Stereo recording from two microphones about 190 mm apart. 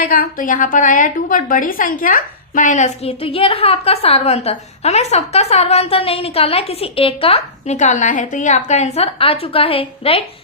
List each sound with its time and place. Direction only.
0.0 s a woman's voice: 50° left (ahead or behind); by 10.2 s 30° left (ahead or behind)